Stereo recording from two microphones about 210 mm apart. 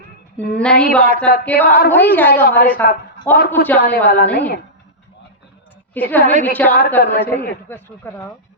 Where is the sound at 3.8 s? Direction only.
50° left (ahead or behind).